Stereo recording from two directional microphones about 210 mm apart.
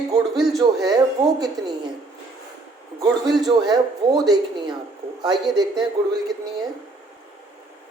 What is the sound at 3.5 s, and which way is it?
Speech, 20° right (ahead or behind).